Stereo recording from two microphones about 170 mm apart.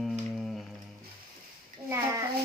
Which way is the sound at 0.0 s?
Centre (ahead or behind).